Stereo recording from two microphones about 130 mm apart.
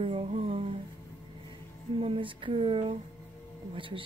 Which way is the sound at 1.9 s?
45° right (ahead or behind).